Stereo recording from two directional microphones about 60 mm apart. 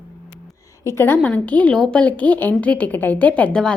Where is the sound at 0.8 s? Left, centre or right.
Left.